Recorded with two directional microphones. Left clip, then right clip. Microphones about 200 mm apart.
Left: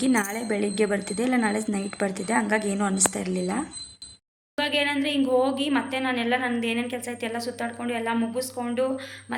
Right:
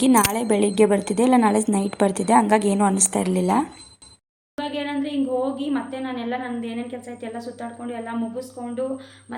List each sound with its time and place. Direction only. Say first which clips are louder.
0.0 s a woman's voice: right 7 dB; 20° right (ahead or behind)
4.5 s a woman's voice: left 3 dB; 5° right (ahead or behind)